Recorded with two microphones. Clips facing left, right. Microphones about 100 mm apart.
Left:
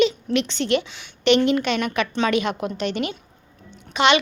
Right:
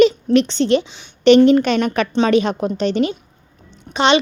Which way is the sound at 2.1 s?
30° right (ahead or behind).